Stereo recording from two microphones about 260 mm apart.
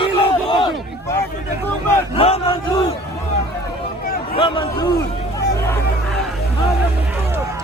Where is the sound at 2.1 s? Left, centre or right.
Left.